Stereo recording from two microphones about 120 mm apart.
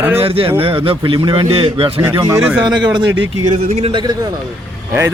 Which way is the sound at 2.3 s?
20° right (ahead or behind).